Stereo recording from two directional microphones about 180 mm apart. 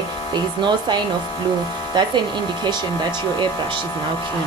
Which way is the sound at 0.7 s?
25° right (ahead or behind).